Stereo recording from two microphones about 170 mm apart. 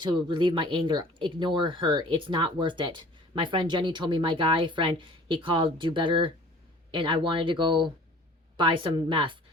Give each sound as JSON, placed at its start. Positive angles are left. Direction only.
{"t": 0.0, "sound": "speech", "side_deg": -25}